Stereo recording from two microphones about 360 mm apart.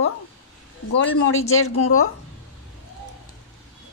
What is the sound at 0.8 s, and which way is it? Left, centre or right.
Speech, left.